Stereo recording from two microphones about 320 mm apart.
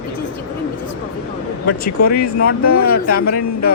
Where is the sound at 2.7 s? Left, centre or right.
Left.